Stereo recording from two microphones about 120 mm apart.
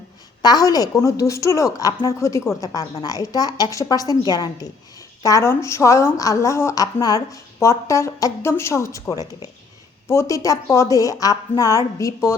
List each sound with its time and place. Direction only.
0.4 s a woman's voice: 30° left (ahead or behind)